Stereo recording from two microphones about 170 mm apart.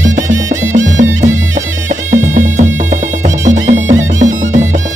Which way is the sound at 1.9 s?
45° right (ahead or behind).